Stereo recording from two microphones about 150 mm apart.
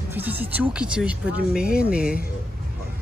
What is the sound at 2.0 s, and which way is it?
Speech, 75° left (ahead or behind).